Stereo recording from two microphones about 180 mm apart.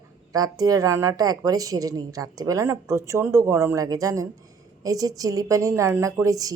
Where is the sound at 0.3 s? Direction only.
20° right (ahead or behind).